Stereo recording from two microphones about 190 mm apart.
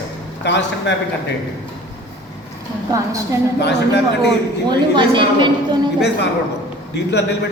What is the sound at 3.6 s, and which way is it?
Speech, 60° left (ahead or behind).